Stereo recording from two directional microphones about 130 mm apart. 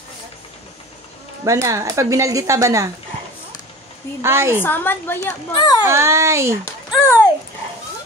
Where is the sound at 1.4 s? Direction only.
25° right (ahead or behind).